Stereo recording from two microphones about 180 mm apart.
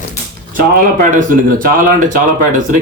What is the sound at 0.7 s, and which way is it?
A man's voice, 45° right (ahead or behind).